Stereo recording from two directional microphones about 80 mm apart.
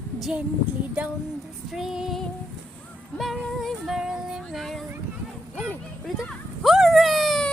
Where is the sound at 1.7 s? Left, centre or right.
Centre.